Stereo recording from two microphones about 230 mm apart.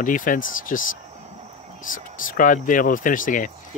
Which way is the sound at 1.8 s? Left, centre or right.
Left.